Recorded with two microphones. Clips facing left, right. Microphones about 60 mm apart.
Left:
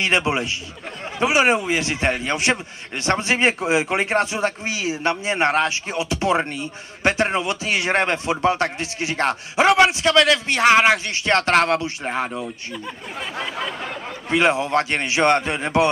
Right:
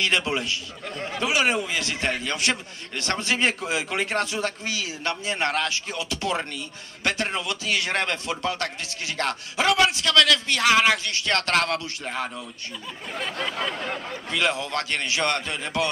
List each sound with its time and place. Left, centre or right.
0.0 s a man's voice: left
13.2 s a sound: centre
14.3 s a man's voice: left